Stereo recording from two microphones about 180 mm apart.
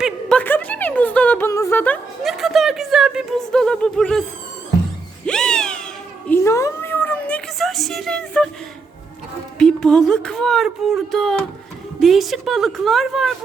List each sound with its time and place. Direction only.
0.0 s a woman's voice: 5° left (ahead or behind)
5.2 s cat: 5° left (ahead or behind)
6.2 s a sound: 15° left (ahead or behind)
9.6 s a woman's voice: 5° left (ahead or behind)